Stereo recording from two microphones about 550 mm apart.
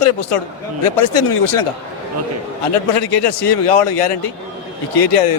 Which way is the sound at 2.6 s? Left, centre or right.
Left.